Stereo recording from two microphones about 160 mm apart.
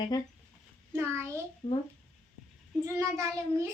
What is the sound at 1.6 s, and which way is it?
Speech, 35° left (ahead or behind).